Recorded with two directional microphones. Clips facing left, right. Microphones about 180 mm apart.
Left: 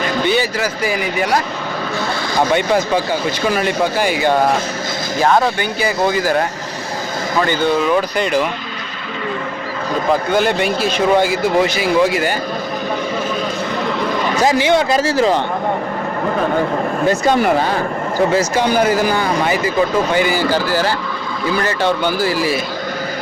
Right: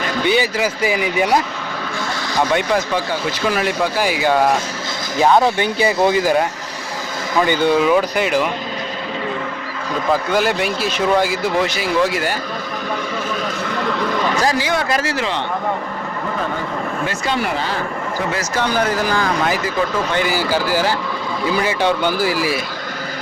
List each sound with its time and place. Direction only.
0.3 s a man's voice: 15° right (ahead or behind)
3.4 s speech: centre (ahead or behind)
5.5 s a man's voice: 25° right (ahead or behind)
7.4 s speech: 15° right (ahead or behind)
10.3 s speech: 5° right (ahead or behind)
14.4 s a man's voice: 25° left (ahead or behind)
17.1 s speech: 45° left (ahead or behind)
18.6 s speech: 10° left (ahead or behind); by 22.5 s 10° right (ahead or behind)